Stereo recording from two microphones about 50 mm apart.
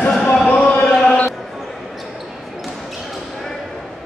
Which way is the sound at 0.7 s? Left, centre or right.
Left.